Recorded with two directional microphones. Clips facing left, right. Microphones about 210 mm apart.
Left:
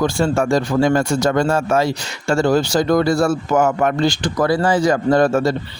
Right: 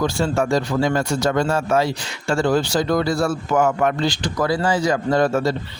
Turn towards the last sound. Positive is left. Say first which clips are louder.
# left 3 dB
turn(degrees=50)  # may be behind; listen again after turning